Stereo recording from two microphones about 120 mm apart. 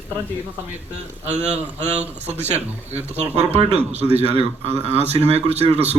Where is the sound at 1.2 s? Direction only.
70° right (ahead or behind).